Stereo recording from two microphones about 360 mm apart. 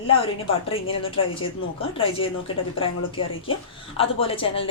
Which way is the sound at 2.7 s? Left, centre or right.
Centre.